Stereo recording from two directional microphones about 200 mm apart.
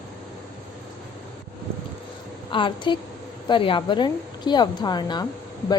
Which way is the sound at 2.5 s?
25° left (ahead or behind).